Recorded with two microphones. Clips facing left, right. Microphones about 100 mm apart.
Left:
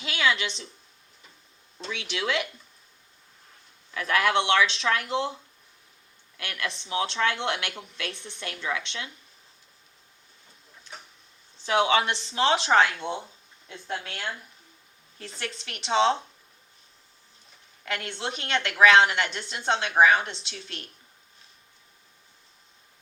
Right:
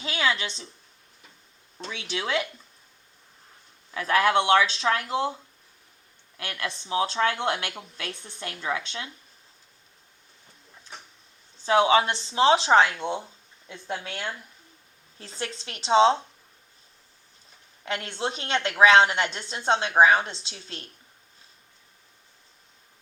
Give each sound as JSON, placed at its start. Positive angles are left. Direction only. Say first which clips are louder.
{"t": 0.0, "sound": "a woman's voice", "louder": "left 1 dB", "side_deg": -35}
{"t": 1.8, "sound": "a woman's voice", "louder": "even", "side_deg": -35}
{"t": 3.9, "sound": "a woman's voice", "louder": "right 2 dB", "side_deg": -30}
{"t": 6.3, "sound": "a woman's voice", "louder": "even", "side_deg": -30}
{"t": 11.6, "sound": "a woman's voice", "louder": "right 3 dB", "side_deg": -30}
{"t": 17.8, "sound": "a woman's voice", "louder": "right 2 dB", "side_deg": -30}